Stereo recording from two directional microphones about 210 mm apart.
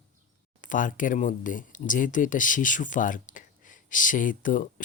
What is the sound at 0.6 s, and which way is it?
Speech, 40° left (ahead or behind).